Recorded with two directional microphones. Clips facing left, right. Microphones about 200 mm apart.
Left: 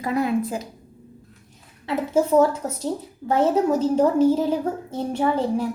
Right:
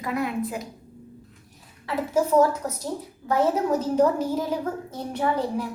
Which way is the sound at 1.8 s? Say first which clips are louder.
Left 3 dB; 25° left (ahead or behind).